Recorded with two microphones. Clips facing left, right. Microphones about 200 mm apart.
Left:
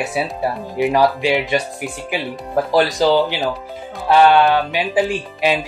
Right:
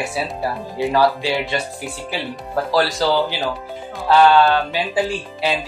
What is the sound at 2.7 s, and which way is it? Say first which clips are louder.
Speech: left 3 dB; 20° left (ahead or behind).